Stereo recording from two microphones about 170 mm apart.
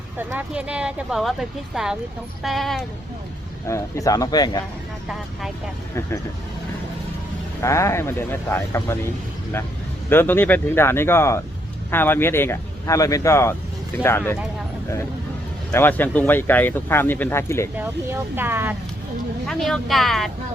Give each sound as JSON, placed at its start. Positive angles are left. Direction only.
{"t": 0.2, "sound": "speech", "side_deg": -10}
{"t": 3.7, "sound": "speech", "side_deg": 15}
{"t": 7.6, "sound": "speech", "side_deg": 15}
{"t": 10.1, "sound": "speech", "side_deg": 15}
{"t": 15.7, "sound": "speech", "side_deg": 10}
{"t": 17.7, "sound": "speech", "side_deg": -10}
{"t": 19.5, "sound": "speech", "side_deg": 0}